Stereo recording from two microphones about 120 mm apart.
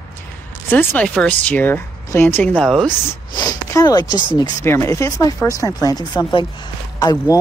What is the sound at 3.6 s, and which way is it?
Speech, 30° left (ahead or behind).